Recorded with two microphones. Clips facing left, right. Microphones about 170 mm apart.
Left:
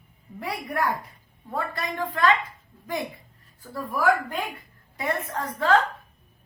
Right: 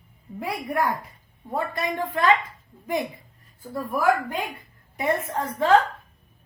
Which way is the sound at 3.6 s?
20° right (ahead or behind).